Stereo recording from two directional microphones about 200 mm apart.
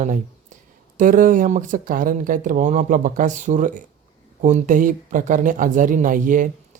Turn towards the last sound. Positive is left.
turn(degrees=-40)  # may be behind; listen again after turning